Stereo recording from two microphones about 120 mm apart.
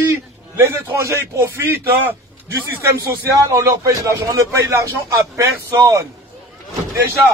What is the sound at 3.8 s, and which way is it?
A man's voice, 25° right (ahead or behind).